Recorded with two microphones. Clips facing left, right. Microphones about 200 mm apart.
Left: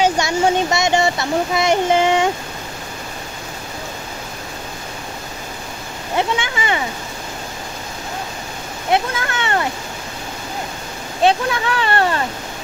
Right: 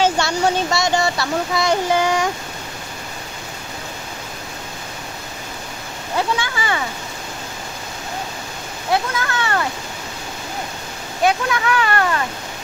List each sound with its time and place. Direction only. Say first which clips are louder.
0.0 s speech: left 1 dB; 15° left (ahead or behind)
6.1 s speech: left 1 dB; 20° left (ahead or behind)
8.9 s speech: left 1 dB; 25° left (ahead or behind)
11.2 s speech: left 2 dB; 30° left (ahead or behind)